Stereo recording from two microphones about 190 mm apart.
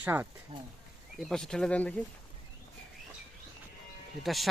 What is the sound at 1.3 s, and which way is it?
Speech, 5° left (ahead or behind).